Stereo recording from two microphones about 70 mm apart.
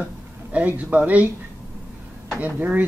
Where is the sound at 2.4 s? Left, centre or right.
Right.